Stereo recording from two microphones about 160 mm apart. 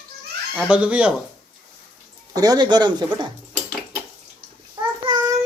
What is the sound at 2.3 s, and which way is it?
Speech, 25° right (ahead or behind).